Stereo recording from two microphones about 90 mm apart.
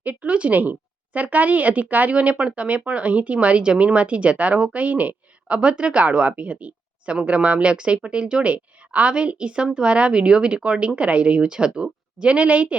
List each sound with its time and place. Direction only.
0.0 s speech: 15° right (ahead or behind)